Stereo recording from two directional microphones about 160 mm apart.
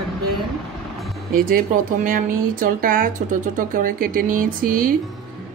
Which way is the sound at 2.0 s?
60° right (ahead or behind).